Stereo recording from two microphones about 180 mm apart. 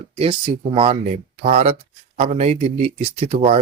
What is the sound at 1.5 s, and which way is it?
Speech, 35° right (ahead or behind).